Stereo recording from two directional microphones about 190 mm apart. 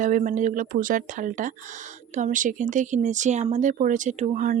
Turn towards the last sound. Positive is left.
turn(degrees=-40)  # may be behind; listen again after turning